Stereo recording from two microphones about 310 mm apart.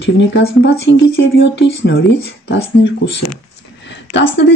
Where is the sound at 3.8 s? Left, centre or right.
Left.